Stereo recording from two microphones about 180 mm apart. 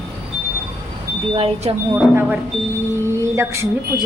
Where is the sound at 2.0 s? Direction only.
10° right (ahead or behind).